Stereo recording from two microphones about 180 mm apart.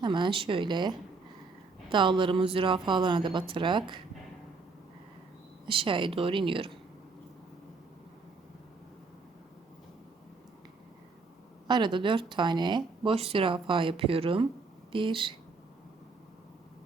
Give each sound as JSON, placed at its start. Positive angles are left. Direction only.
{"t": 0.0, "sound": "speech", "side_deg": -25}
{"t": 5.6, "sound": "speech", "side_deg": -30}
{"t": 11.7, "sound": "speech", "side_deg": -25}